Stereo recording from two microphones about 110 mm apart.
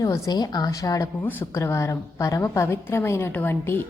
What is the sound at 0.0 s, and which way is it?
A woman's voice, 35° left (ahead or behind).